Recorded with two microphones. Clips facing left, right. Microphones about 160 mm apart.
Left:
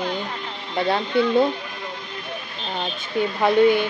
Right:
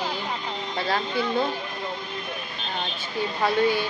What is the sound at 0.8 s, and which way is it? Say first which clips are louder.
Speech: left 6 dB; 25° left (ahead or behind).